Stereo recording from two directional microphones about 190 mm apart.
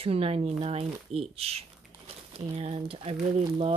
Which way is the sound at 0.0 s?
30° right (ahead or behind).